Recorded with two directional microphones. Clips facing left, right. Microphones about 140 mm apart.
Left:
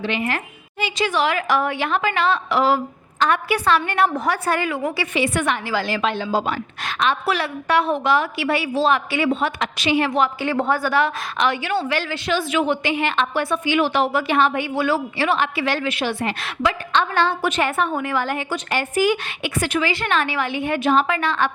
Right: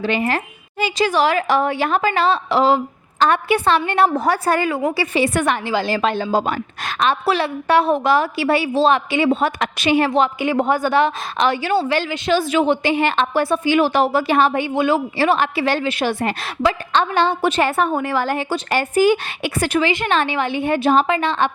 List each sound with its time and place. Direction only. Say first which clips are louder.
0.0 s a woman's voice: right 4 dB; 40° right (ahead or behind)
5.6 s a woman's voice: right 3 dB; 25° right (ahead or behind)
9.3 s a woman's voice: right 3 dB; 45° right (ahead or behind)
10.4 s a woman's voice: right 3 dB; 15° right (ahead or behind); by 12.0 s 30° right (ahead or behind)
12.0 s a woman's voice: right 3 dB; 20° right (ahead or behind)
12.3 s a woman's voice: right 4 dB; 35° right (ahead or behind)
14.7 s a woman's voice: right 3 dB; 20° right (ahead or behind)
15.2 s a woman's voice: right 3 dB; 35° right (ahead or behind)
17.2 s a woman's voice: right 4 dB; 15° right (ahead or behind)
17.6 s a woman's voice: right 2 dB; 35° right (ahead or behind)
19.9 s a woman's voice: right 3 dB; 25° right (ahead or behind)